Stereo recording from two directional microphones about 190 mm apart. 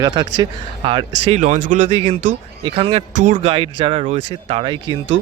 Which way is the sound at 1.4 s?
40° right (ahead or behind).